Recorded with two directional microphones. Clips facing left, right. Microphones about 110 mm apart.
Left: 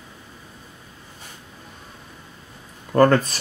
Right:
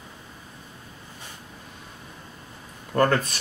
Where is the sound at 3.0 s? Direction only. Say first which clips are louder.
Left 6 dB; 35° left (ahead or behind).